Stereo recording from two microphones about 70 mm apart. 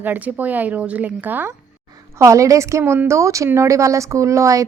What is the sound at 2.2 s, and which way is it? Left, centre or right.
A woman's voice, right.